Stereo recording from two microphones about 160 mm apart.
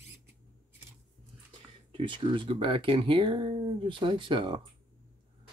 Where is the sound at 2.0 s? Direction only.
30° right (ahead or behind).